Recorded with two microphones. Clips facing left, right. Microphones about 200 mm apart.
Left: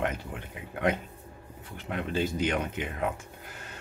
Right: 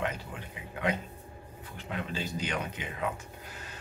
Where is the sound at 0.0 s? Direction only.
55° left (ahead or behind).